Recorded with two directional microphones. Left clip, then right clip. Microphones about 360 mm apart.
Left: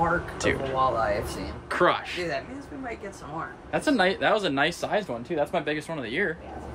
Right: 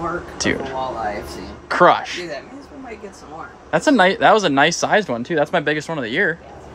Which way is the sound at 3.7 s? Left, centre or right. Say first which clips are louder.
Right 9 dB; centre.